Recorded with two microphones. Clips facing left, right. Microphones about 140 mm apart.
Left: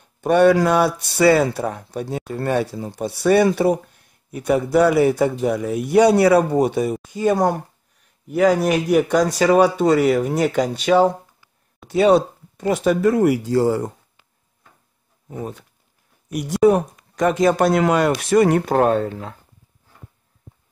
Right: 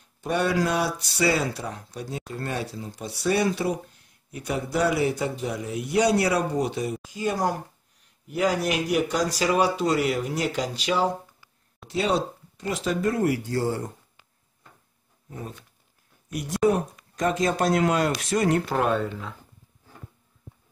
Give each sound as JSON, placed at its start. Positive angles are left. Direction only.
{"t": 0.0, "sound": "speech", "side_deg": 60}
{"t": 16.3, "sound": "speech", "side_deg": 75}